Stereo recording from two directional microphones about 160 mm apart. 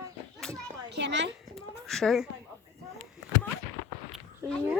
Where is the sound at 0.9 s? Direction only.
90° right.